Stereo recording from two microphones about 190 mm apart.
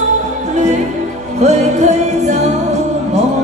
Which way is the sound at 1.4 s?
35° right (ahead or behind).